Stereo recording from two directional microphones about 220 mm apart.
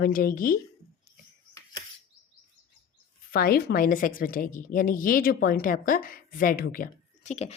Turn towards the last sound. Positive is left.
turn(degrees=30)  # may be behind; listen again after turning